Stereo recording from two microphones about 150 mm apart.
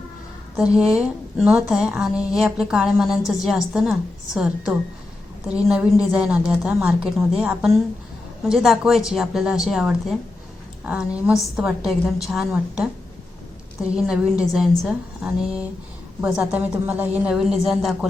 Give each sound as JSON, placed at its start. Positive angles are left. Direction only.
{"t": 0.5, "sound": "a woman's voice", "side_deg": -5}
{"t": 13.9, "sound": "a woman's voice", "side_deg": -5}